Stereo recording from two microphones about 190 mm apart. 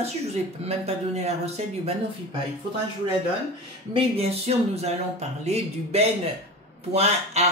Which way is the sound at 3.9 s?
30° right (ahead or behind).